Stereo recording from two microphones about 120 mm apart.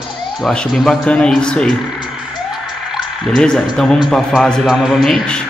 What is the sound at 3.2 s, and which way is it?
Speech, 5° left (ahead or behind).